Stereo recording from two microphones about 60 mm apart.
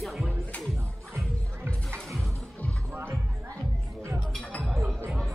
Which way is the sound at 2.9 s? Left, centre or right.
Right.